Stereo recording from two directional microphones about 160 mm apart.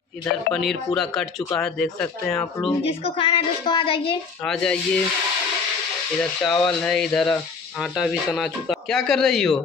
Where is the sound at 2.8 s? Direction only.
35° left (ahead or behind).